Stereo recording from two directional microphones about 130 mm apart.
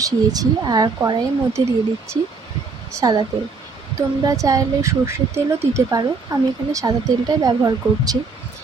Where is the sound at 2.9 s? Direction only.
25° right (ahead or behind).